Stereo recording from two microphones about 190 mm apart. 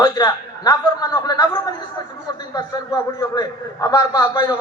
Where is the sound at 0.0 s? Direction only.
20° left (ahead or behind).